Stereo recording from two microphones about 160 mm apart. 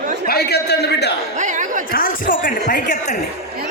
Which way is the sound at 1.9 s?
60° left (ahead or behind).